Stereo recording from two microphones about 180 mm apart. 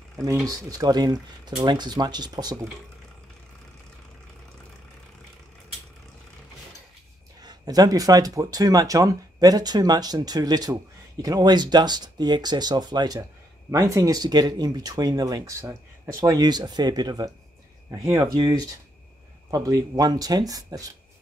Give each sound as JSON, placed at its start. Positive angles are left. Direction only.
{"t": 0.2, "sound": "speech", "side_deg": -20}
{"t": 7.4, "sound": "speech", "side_deg": -20}